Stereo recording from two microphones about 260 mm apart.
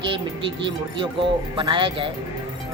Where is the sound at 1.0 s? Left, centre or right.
Centre.